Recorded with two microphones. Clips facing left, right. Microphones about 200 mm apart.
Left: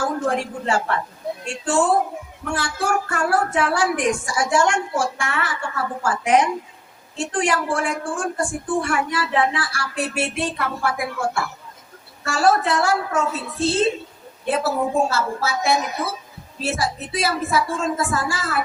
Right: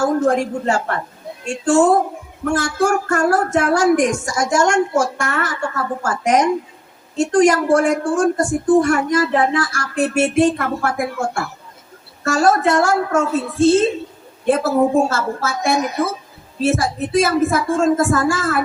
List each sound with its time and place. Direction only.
0.0 s a woman's voice: 40° right (ahead or behind)